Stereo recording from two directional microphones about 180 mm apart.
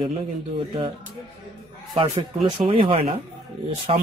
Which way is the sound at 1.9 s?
30° right (ahead or behind).